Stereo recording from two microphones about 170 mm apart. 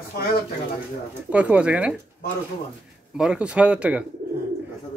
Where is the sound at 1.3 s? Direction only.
10° right (ahead or behind).